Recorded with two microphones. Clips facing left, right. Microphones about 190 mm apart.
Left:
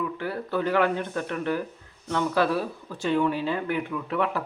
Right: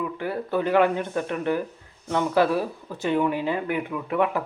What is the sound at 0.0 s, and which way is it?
Speech, 20° right (ahead or behind).